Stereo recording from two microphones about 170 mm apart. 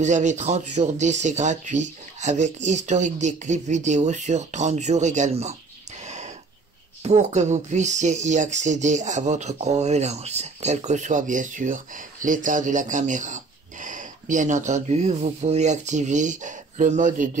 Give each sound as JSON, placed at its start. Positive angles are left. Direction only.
{"t": 0.0, "sound": "speech", "side_deg": -45}
{"t": 6.0, "sound": "a sound", "side_deg": -45}
{"t": 7.0, "sound": "speech", "side_deg": -40}